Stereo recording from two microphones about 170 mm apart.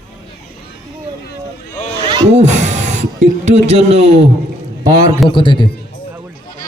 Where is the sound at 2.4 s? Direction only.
45° right (ahead or behind).